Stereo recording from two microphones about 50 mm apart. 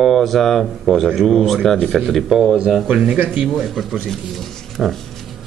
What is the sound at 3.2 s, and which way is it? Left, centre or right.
Speech, right.